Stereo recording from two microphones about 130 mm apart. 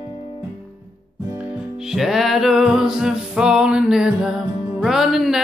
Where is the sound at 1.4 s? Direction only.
5° right (ahead or behind).